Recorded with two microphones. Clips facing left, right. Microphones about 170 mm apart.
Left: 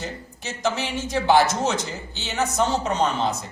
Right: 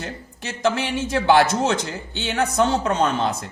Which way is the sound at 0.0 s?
60° right (ahead or behind).